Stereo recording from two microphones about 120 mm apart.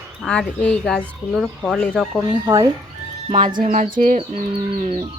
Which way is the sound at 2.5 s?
30° right (ahead or behind).